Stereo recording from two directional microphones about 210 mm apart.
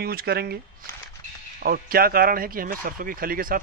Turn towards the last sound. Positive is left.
turn(degrees=-45)  # may be behind; listen again after turning